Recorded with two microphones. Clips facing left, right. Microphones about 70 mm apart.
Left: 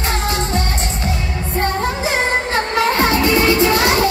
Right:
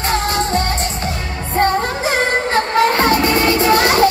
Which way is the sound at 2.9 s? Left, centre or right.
Right.